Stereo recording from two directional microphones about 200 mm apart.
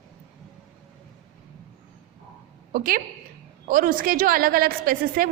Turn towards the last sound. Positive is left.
turn(degrees=-45)  # may be behind; listen again after turning